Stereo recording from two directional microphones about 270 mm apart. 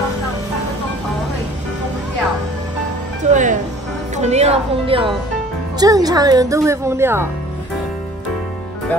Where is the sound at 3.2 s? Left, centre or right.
Right; by 7.3 s centre.